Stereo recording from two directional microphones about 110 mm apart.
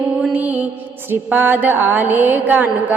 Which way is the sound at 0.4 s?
15° right (ahead or behind).